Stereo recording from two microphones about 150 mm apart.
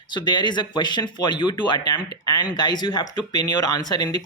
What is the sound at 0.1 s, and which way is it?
Speech, 30° left (ahead or behind).